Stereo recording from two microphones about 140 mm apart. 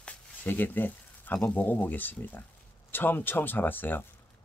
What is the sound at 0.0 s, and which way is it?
Speech, 10° left (ahead or behind).